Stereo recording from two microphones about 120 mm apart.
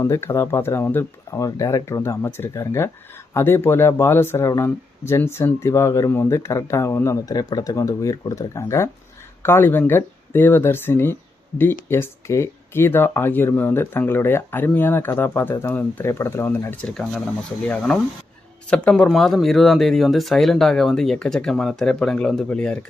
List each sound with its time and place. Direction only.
0.0 s speech: 25° left (ahead or behind)
16.8 s speech: 5° left (ahead or behind)